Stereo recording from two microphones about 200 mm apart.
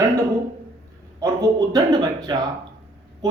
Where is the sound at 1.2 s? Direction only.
15° right (ahead or behind).